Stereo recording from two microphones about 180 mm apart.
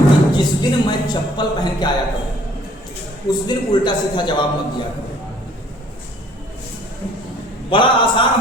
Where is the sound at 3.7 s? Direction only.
25° left (ahead or behind).